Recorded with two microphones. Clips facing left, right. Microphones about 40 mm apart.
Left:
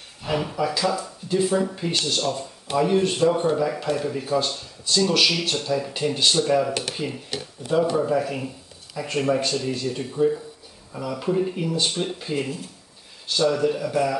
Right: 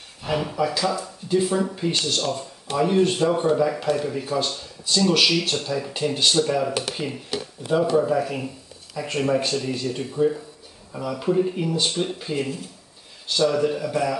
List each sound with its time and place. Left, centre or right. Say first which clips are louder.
0.2 s speech: right 1 dB; centre
7.0 s speech: even; right
8.0 s speech: right 1 dB; centre